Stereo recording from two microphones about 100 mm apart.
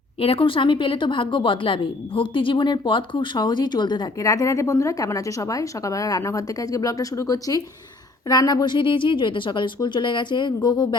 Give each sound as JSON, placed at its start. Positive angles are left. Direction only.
{"t": 0.2, "sound": "a woman's voice", "side_deg": 65}
{"t": 4.2, "sound": "a woman's voice", "side_deg": 35}